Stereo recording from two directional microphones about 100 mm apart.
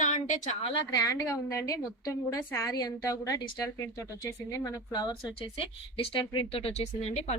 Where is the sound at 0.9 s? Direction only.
35° left (ahead or behind).